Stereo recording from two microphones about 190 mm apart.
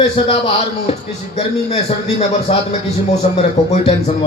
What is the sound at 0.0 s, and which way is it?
A man's voice, 30° left (ahead or behind).